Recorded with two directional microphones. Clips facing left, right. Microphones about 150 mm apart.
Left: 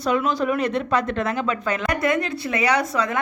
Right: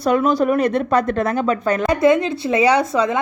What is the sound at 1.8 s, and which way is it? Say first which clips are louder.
A woman's voice: right 8 dB; 25° right (ahead or behind).